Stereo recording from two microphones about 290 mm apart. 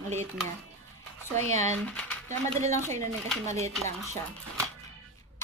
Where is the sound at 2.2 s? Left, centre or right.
Right.